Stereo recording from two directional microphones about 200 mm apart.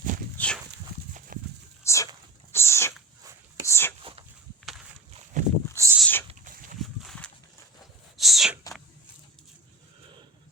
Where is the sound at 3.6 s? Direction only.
10° left (ahead or behind).